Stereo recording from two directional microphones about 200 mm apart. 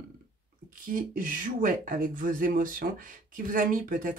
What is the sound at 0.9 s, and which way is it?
Speech, 45° right (ahead or behind).